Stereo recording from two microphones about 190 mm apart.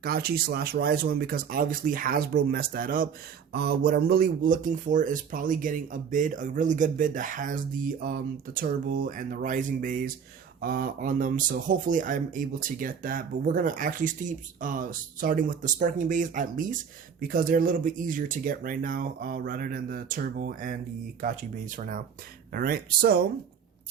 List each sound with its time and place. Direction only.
0.0 s speech: 55° right (ahead or behind)